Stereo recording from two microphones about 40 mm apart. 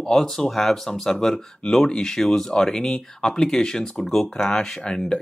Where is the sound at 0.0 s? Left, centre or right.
Centre.